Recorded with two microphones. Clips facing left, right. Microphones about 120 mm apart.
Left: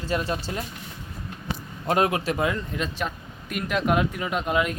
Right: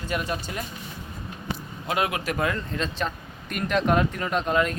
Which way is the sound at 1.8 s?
40° left (ahead or behind).